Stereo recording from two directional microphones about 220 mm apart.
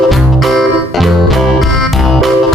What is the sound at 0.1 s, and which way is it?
Music, centre (ahead or behind).